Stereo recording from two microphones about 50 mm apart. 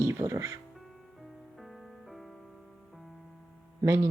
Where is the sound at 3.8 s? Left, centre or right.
Right.